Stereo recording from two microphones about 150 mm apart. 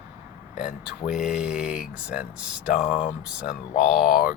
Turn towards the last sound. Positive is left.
turn(degrees=75)  # may be behind; listen again after turning